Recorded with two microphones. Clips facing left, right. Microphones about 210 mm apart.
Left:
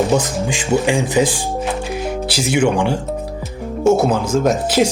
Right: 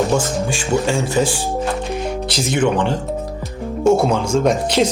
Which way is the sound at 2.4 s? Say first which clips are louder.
Left 1 dB; 10° left (ahead or behind).